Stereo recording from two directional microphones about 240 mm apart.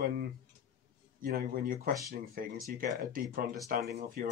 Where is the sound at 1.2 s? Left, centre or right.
Right.